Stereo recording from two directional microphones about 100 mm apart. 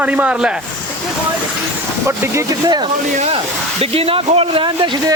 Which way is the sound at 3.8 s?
75° right (ahead or behind).